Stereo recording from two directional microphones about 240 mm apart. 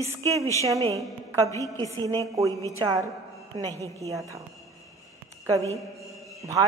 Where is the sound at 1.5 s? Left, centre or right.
Centre.